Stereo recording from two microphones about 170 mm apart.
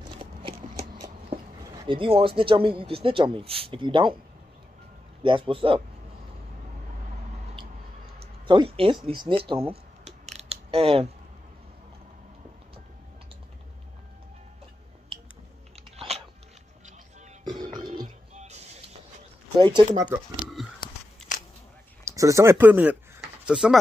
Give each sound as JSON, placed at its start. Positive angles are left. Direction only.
{"t": 0.0, "sound": "a sound", "side_deg": -30}
{"t": 1.0, "sound": "speech", "side_deg": -20}
{"t": 5.2, "sound": "speech", "side_deg": -30}
{"t": 8.2, "sound": "a sound", "side_deg": -30}
{"t": 9.0, "sound": "speech", "side_deg": -30}
{"t": 10.3, "sound": "mechanisms", "side_deg": -35}
{"t": 17.5, "sound": "music", "side_deg": -25}
{"t": 17.9, "sound": "music", "side_deg": -45}
{"t": 19.5, "sound": "speech", "side_deg": -25}
{"t": 20.6, "sound": "a sound", "side_deg": 0}
{"t": 22.0, "sound": "speech", "side_deg": -20}